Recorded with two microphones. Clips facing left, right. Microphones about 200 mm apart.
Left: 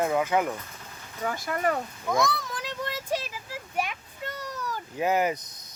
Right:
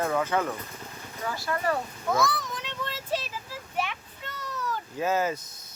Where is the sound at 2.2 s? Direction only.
Centre (ahead or behind).